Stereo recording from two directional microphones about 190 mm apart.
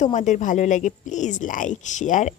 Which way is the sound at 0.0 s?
40° left (ahead or behind).